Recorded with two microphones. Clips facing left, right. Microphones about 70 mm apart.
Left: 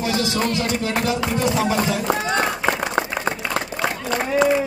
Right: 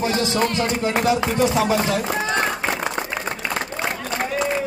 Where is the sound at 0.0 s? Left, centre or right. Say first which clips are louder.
Right 1 dB; right.